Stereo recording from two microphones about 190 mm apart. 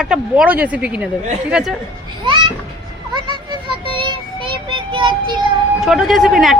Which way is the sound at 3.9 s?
25° right (ahead or behind).